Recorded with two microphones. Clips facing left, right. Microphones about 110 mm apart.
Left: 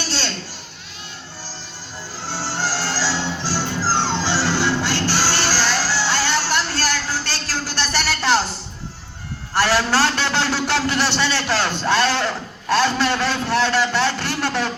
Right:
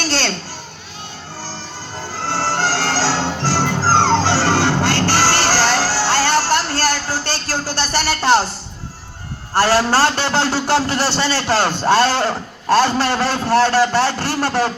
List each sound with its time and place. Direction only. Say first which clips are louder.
0.0 s children playing: right 6 dB; 55° right (ahead or behind)
2.1 s music: right 7 dB; 50° right (ahead or behind)
9.6 s a man's voice: right 4 dB; 35° right (ahead or behind)